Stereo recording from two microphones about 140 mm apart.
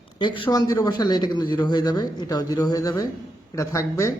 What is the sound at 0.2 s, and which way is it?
Speech, 35° left (ahead or behind).